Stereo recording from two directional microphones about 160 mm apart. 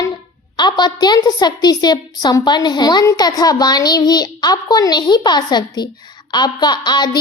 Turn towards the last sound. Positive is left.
turn(degrees=25)  # may be behind; listen again after turning